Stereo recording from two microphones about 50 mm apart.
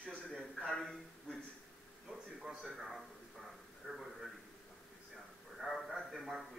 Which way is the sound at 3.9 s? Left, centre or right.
Centre.